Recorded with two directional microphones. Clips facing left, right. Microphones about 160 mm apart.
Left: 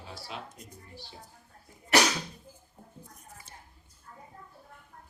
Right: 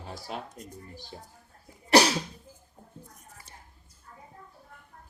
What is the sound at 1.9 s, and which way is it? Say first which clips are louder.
Cough: right 5 dB; 35° right (ahead or behind).